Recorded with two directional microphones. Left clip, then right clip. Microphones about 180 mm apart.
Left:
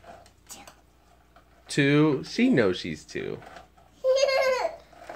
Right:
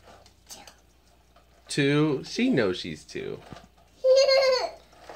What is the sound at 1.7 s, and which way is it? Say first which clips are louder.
Speech: left 2 dB; 10° left (ahead or behind).